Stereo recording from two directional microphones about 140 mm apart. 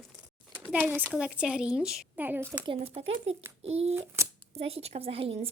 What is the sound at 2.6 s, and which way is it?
Speech, 40° right (ahead or behind).